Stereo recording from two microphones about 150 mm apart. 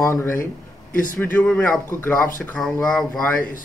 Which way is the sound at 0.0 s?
15° left (ahead or behind).